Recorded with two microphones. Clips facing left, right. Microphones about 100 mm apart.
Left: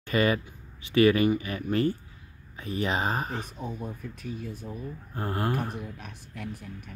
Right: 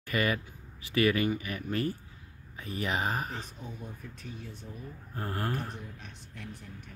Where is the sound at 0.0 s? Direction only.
25° left (ahead or behind).